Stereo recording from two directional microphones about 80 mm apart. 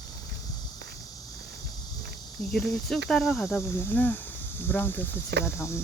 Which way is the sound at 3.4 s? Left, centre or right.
Left.